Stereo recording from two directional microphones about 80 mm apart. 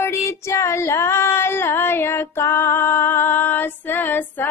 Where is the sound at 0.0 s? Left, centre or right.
Left.